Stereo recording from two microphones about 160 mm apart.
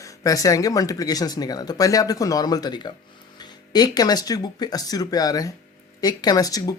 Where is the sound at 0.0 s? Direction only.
20° left (ahead or behind).